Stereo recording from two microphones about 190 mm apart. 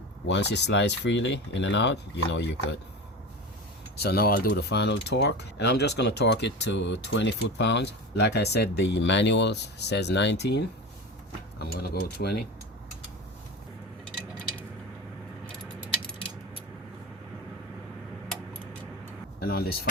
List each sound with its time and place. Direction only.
0.3 s speech: 65° left (ahead or behind)
3.9 s speech: 55° left (ahead or behind)
11.6 s speech: 55° left (ahead or behind)
19.4 s speech: 55° left (ahead or behind)